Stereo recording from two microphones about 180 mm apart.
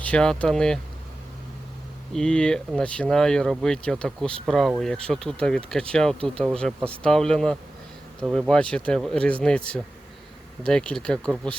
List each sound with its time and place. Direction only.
0.0 s speech: 5° left (ahead or behind)
2.1 s speech: 5° left (ahead or behind)